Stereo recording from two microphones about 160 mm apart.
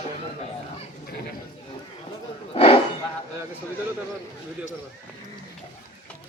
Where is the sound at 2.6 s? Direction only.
35° left (ahead or behind).